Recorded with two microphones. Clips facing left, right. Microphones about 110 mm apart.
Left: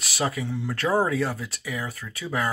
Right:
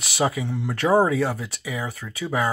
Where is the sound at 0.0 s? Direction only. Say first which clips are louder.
Right 4 dB; 15° right (ahead or behind).